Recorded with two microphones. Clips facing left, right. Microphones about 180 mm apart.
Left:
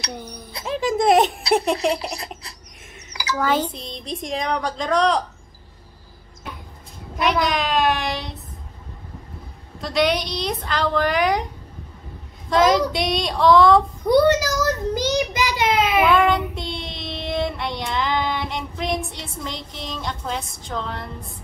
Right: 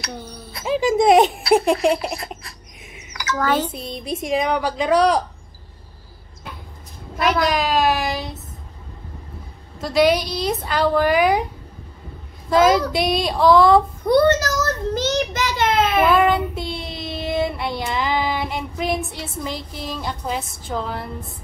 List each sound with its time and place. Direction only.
0.0 s speech: 15° left (ahead or behind)
0.7 s a sound: centre (ahead or behind)
3.3 s a child's voice: 10° left (ahead or behind)
3.7 s a woman's voice: 5° right (ahead or behind)
7.2 s a child's voice: centre (ahead or behind)
9.8 s a woman's voice: 5° right (ahead or behind)
12.4 s a woman's voice: 5° right (ahead or behind)
12.9 s a sound: 5° right (ahead or behind)
14.0 s a child's voice: 10° left (ahead or behind)
16.0 s child singing: 5° right (ahead or behind)